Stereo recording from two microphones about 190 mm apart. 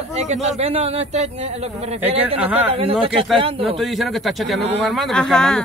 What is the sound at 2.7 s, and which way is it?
Speech, 30° right (ahead or behind).